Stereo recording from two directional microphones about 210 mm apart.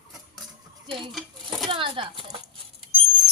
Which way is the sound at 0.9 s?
25° right (ahead or behind).